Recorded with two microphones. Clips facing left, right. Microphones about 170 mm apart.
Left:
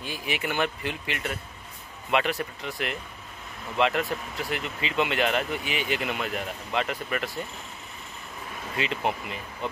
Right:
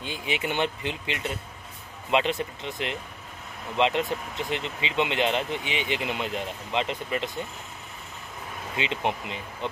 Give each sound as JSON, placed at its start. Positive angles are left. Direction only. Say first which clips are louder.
{"t": 0.0, "sound": "speech", "louder": "right 1 dB", "side_deg": -25}
{"t": 8.7, "sound": "speech", "louder": "even", "side_deg": -20}